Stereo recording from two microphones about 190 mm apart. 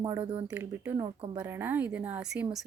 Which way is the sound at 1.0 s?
20° right (ahead or behind).